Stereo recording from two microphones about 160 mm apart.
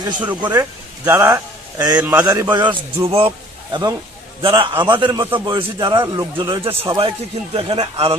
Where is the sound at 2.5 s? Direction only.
30° right (ahead or behind).